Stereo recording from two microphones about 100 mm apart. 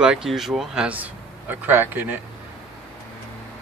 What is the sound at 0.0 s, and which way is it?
Speech, 5° right (ahead or behind).